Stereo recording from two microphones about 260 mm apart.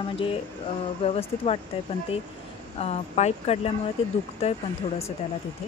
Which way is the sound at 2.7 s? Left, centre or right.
Left.